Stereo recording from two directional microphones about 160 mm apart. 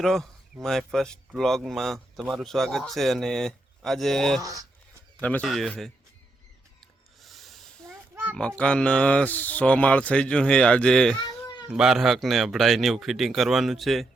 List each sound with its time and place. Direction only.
0.0 s speech: centre (ahead or behind)
4.4 s speech: 20° right (ahead or behind)
5.2 s speech: 5° left (ahead or behind)
7.2 s a sound: centre (ahead or behind)
8.1 s oink: 10° right (ahead or behind)
8.4 s speech: 5° left (ahead or behind)